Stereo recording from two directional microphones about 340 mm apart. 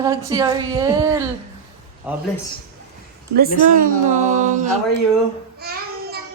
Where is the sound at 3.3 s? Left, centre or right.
Right.